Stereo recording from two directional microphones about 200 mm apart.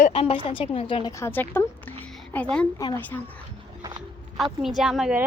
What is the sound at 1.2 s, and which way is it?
A woman's voice, 10° left (ahead or behind).